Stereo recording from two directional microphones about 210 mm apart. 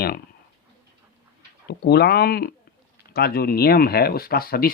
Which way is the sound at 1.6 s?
50° left (ahead or behind).